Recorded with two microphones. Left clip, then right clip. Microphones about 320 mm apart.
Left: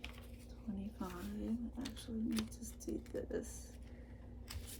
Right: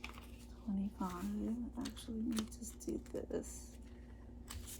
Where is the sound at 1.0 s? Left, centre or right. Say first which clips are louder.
Right 3 dB; centre.